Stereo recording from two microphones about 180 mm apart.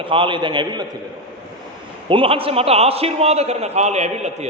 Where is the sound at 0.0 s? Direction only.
30° right (ahead or behind).